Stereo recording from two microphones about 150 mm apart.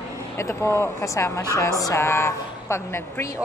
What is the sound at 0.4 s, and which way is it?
Speech, 20° left (ahead or behind).